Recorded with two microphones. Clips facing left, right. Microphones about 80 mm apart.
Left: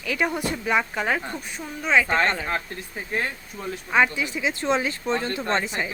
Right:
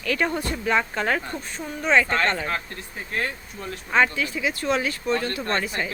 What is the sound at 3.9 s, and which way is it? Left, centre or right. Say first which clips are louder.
Speech: even; centre.